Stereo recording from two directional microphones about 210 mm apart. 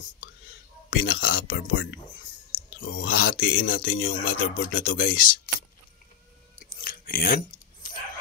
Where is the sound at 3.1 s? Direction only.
45° left (ahead or behind).